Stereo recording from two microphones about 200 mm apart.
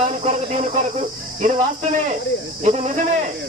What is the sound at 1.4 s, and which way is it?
Speech, 40° right (ahead or behind).